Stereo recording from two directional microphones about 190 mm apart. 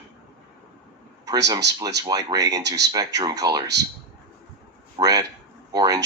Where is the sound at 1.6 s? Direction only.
65° right (ahead or behind).